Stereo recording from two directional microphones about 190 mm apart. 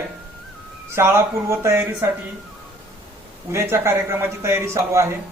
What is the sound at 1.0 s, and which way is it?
Speech, 15° right (ahead or behind).